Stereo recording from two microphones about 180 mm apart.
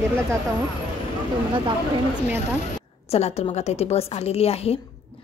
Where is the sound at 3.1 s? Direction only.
35° left (ahead or behind).